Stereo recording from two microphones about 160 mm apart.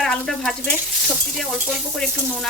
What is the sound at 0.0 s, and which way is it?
Frying, 5° left (ahead or behind).